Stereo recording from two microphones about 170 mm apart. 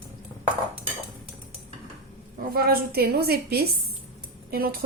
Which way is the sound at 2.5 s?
60° right (ahead or behind).